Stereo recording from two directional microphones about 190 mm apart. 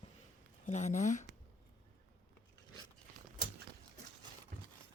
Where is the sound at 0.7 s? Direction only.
40° left (ahead or behind).